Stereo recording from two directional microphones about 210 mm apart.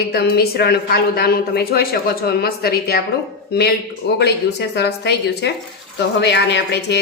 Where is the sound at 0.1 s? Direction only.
50° left (ahead or behind).